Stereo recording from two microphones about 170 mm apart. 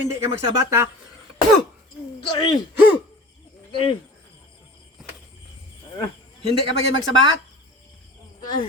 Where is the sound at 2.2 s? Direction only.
25° left (ahead or behind).